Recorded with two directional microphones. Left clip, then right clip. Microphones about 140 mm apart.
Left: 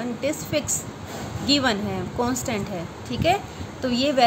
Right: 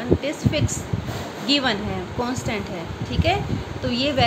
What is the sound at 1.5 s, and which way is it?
Speech, 30° left (ahead or behind).